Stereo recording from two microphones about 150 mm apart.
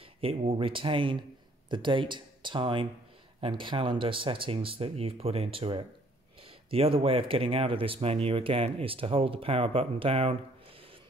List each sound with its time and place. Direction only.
0.2 s speech: 40° right (ahead or behind)